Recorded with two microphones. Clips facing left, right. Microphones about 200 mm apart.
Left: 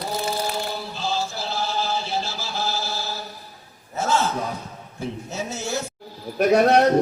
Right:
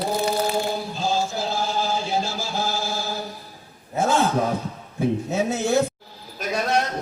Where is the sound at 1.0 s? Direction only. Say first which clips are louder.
Right 3 dB; 50° right (ahead or behind).